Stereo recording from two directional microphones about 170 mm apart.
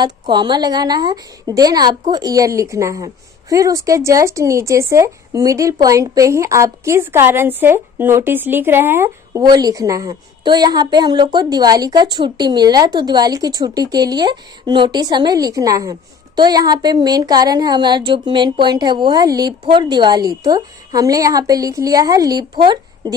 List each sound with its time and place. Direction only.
0.0 s a woman's voice: 25° right (ahead or behind)